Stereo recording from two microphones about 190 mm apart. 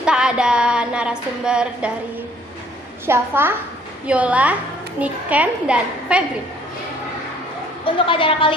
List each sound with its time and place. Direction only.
0.0 s a sound: 5° right (ahead or behind)
3.1 s a woman's voice: 10° right (ahead or behind)
7.9 s a woman's voice: 25° left (ahead or behind)